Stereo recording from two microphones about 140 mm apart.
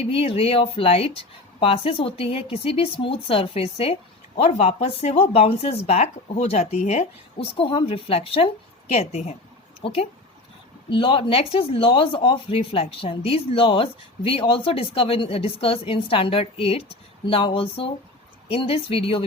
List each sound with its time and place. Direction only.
0.0 s speech: 45° left (ahead or behind)